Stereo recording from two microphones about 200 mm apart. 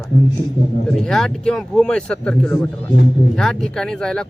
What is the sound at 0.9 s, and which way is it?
Speech, centre (ahead or behind).